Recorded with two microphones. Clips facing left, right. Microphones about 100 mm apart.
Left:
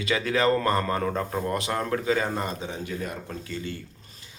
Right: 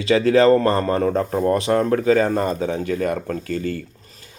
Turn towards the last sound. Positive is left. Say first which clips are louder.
# right 10 dB
turn(degrees=-50)  # may be behind; listen again after turning